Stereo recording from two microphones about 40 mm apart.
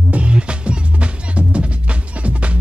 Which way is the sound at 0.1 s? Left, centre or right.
Right.